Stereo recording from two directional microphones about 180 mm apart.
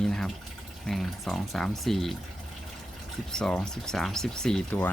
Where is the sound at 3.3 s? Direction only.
5° left (ahead or behind).